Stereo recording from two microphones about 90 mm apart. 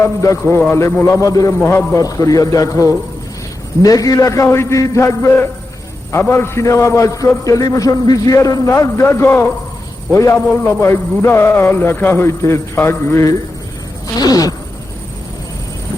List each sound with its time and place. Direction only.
0.0 s a man's voice: 35° left (ahead or behind)
1.5 s speech: 25° left (ahead or behind)
2.0 s a man's voice: 40° left (ahead or behind)
10.3 s speech: 20° left (ahead or behind)
14.2 s a sound: 45° left (ahead or behind)